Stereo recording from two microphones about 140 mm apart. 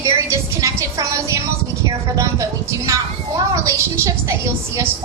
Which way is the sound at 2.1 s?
20° right (ahead or behind).